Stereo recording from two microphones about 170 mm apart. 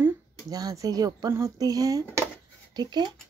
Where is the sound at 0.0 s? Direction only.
20° right (ahead or behind).